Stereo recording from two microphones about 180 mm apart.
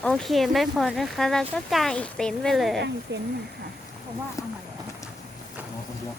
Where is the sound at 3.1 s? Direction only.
75° right (ahead or behind).